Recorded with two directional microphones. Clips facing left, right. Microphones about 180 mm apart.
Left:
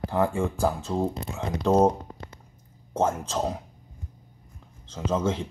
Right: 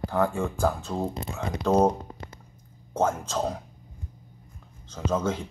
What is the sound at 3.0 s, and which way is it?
Speech, 5° left (ahead or behind).